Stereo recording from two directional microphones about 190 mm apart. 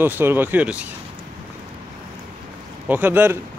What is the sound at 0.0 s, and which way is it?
Speech, 10° right (ahead or behind).